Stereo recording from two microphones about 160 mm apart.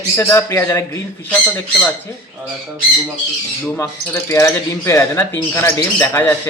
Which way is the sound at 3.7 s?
15° left (ahead or behind).